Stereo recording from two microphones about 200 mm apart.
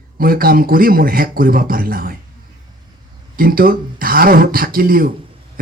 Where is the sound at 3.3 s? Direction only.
45° right (ahead or behind).